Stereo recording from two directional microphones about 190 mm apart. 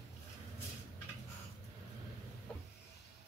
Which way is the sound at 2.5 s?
5° left (ahead or behind).